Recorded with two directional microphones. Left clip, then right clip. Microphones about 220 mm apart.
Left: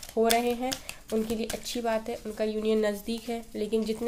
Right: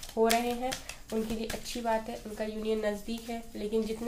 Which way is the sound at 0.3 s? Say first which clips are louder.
Left 3 dB; 40° left (ahead or behind).